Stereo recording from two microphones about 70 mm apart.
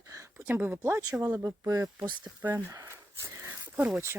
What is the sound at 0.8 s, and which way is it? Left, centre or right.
Speech, right.